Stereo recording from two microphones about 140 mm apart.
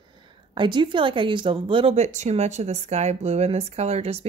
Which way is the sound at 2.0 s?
55° right (ahead or behind).